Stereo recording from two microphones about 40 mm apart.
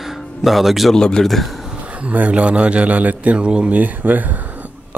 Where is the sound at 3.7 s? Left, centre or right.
Right.